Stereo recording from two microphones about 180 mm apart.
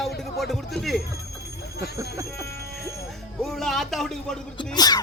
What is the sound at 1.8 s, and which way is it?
Speech, 15° right (ahead or behind).